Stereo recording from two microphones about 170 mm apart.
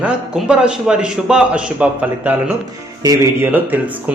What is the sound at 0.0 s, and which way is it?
Speech, 5° right (ahead or behind).